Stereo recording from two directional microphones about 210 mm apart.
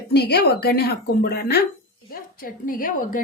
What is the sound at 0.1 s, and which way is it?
A woman's voice, 50° left (ahead or behind).